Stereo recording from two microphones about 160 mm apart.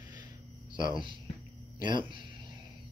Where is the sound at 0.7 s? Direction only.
30° right (ahead or behind).